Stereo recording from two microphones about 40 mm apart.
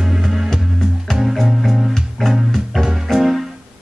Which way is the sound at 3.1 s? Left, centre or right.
Centre.